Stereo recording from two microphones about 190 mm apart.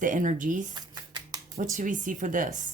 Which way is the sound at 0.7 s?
20° right (ahead or behind).